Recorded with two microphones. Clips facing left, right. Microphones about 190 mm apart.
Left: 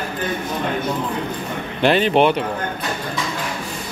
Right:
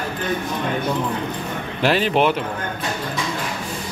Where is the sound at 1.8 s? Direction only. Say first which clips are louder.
Left 3 dB; centre (ahead or behind).